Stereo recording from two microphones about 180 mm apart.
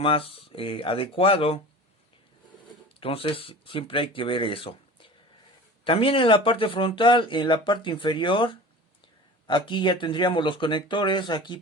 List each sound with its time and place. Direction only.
0.0 s speech: 30° left (ahead or behind)
3.0 s speech: 30° left (ahead or behind)